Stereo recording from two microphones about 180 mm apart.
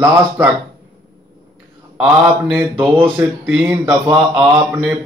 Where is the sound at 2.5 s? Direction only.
10° right (ahead or behind).